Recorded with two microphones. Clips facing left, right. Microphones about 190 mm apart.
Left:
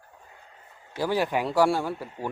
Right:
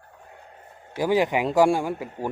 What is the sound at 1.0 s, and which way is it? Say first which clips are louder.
Speech: right 4 dB; 15° right (ahead or behind).